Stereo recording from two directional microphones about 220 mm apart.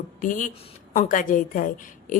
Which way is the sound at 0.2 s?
35° left (ahead or behind).